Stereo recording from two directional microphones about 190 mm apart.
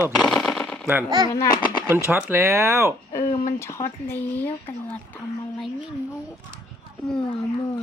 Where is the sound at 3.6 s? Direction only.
15° left (ahead or behind).